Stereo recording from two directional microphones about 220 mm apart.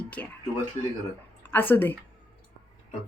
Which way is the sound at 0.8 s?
30° left (ahead or behind).